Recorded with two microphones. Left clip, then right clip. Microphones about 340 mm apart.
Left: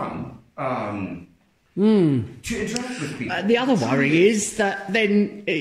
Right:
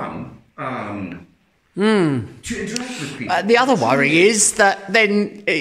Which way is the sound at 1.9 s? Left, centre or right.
Right.